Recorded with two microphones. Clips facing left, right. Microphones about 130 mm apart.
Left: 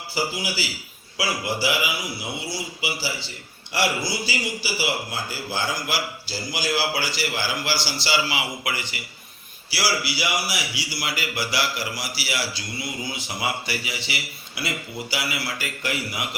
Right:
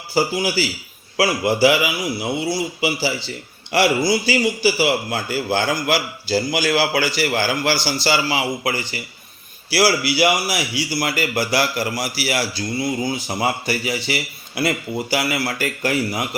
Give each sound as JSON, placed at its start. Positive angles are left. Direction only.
{"t": 0.1, "sound": "a man's voice", "side_deg": -45}
{"t": 1.1, "sound": "a man's voice", "side_deg": -60}
{"t": 3.7, "sound": "a man's voice", "side_deg": -70}
{"t": 9.7, "sound": "a man's voice", "side_deg": -55}